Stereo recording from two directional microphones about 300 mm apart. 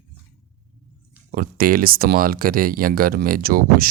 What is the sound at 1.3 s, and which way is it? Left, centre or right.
Speech, right.